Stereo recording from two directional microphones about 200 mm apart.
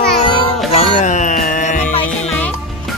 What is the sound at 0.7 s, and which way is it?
Music, 35° left (ahead or behind).